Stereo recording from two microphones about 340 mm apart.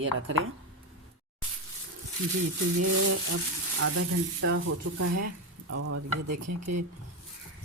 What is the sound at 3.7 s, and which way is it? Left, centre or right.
Frying, right.